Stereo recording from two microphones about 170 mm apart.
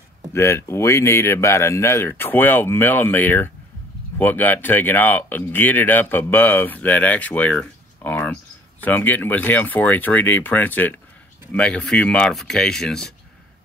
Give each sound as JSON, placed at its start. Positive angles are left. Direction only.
{"t": 0.3, "sound": "speech", "side_deg": 15}